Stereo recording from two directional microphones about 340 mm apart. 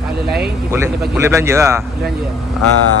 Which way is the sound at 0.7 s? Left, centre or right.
Centre.